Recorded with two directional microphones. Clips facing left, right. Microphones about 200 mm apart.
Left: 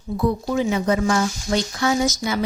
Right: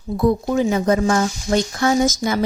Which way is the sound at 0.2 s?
45° right (ahead or behind).